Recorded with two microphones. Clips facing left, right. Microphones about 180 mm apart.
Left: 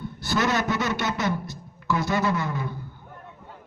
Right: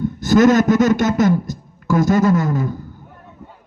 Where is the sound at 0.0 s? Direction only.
45° right (ahead or behind).